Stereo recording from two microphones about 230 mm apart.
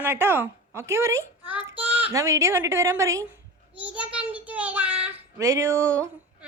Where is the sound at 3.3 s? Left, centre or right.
Centre.